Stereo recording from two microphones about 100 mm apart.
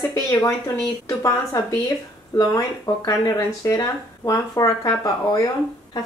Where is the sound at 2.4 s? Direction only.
35° left (ahead or behind).